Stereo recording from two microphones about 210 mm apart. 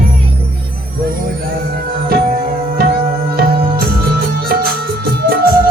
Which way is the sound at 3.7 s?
45° right (ahead or behind).